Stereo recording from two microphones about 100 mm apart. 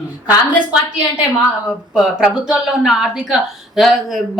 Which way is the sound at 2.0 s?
10° right (ahead or behind).